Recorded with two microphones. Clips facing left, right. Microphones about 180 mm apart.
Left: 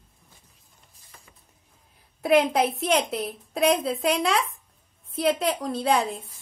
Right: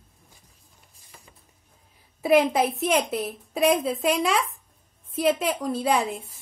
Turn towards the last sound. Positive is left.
turn(degrees=-5)  # may be behind; listen again after turning